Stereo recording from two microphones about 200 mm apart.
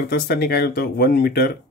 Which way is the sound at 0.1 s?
55° left (ahead or behind).